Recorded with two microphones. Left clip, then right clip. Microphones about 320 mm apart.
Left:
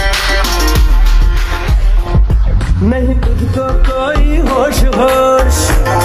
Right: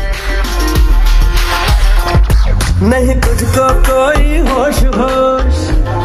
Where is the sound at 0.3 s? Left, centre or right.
Centre.